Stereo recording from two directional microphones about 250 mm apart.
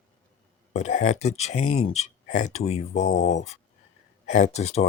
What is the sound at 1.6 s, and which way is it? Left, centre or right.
Speech, left.